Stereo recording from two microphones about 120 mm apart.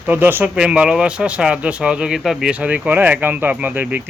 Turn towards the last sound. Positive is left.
turn(degrees=-15)  # may be behind; listen again after turning